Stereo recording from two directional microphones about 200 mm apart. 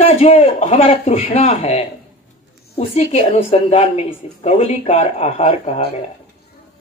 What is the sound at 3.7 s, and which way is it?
Speech, 30° left (ahead or behind).